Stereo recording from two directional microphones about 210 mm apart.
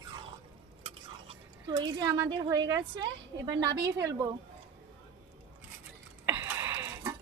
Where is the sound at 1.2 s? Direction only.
20° right (ahead or behind).